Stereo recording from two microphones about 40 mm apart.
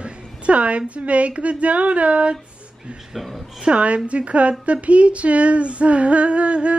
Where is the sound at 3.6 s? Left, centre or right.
Right.